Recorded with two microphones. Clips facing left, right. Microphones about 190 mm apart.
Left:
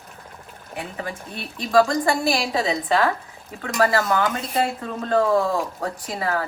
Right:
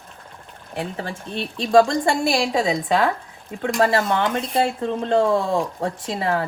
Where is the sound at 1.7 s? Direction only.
25° right (ahead or behind).